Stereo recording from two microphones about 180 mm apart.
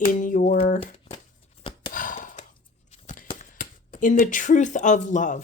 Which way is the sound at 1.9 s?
50° left (ahead or behind).